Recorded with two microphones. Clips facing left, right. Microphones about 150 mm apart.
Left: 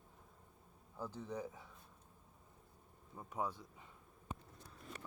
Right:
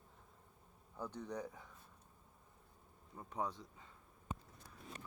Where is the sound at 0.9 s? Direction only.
5° left (ahead or behind).